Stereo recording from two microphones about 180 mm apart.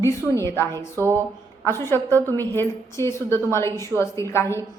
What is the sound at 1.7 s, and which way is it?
A woman's voice, 15° left (ahead or behind).